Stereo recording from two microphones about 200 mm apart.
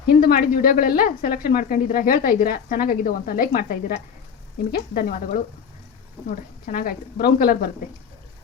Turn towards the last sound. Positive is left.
turn(degrees=50)  # may be behind; listen again after turning